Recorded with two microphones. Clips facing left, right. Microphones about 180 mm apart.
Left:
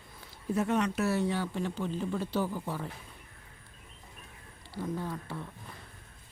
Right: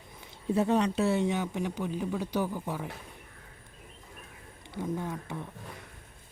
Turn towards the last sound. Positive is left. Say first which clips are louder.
# right 1 dB
turn(degrees=-20)  # may be behind; listen again after turning